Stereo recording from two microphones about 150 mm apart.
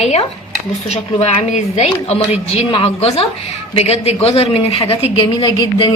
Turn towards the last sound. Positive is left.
turn(degrees=30)  # may be behind; listen again after turning